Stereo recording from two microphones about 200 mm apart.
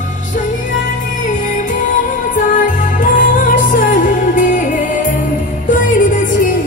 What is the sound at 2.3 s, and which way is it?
Music, 40° left (ahead or behind).